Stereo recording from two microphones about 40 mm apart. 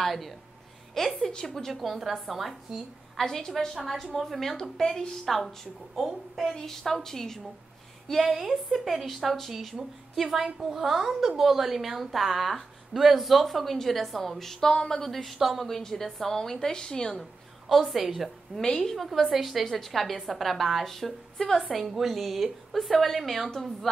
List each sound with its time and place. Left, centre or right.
0.0 s a woman's voice: centre
3.3 s a woman's voice: centre
5.9 s a woman's voice: centre
8.1 s a woman's voice: centre
15.3 s a woman's voice: centre
15.6 s a woman's voice: centre
17.2 s a woman's voice: centre
18.6 s a woman's voice: centre
19.0 s a woman's voice: centre